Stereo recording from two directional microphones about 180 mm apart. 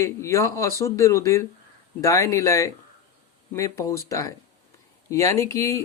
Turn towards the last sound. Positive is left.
turn(degrees=15)  # may be behind; listen again after turning